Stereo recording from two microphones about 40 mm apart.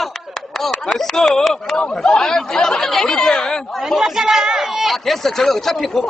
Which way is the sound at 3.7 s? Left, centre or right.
Centre.